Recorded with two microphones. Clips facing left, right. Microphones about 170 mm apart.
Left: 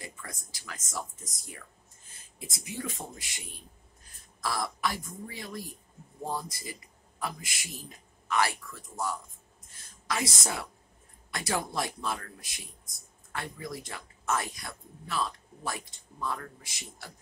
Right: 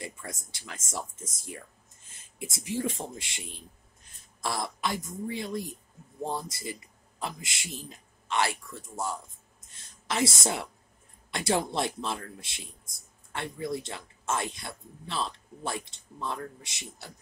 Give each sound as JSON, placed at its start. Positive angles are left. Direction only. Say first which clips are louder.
{"t": 0.0, "sound": "speech", "louder": "right 4 dB", "side_deg": -25}
{"t": 9.7, "sound": "a sound", "louder": "even", "side_deg": -25}
{"t": 10.4, "sound": "speech", "louder": "right 4 dB", "side_deg": -25}